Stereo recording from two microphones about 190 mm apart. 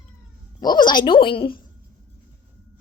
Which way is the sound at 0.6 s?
20° left (ahead or behind).